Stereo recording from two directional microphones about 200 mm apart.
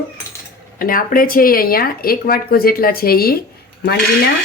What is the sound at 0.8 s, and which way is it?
Speech, 45° left (ahead or behind).